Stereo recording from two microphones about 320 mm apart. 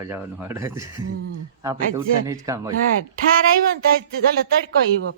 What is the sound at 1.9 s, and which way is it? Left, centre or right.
Speech, centre.